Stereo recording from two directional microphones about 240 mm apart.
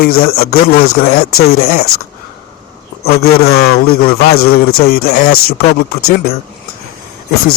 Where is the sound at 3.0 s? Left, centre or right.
Left.